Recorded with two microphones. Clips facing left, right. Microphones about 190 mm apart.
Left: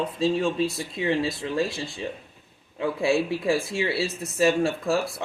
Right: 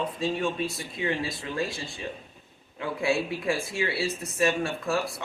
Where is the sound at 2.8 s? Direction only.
25° left (ahead or behind).